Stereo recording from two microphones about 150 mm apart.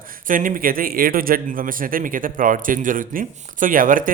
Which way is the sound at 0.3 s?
65° right (ahead or behind).